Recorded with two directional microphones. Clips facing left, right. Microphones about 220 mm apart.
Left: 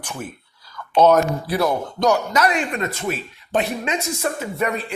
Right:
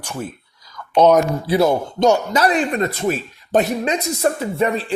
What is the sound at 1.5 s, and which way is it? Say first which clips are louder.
A man's voice: right 5 dB; 25° right (ahead or behind).